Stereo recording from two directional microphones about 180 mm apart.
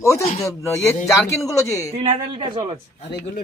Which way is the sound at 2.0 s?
30° right (ahead or behind).